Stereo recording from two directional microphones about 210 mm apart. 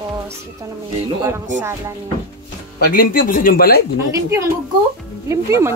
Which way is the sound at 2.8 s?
45° left (ahead or behind).